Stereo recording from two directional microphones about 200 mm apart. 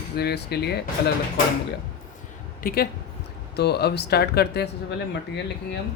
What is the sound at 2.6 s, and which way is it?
Speech, 45° left (ahead or behind).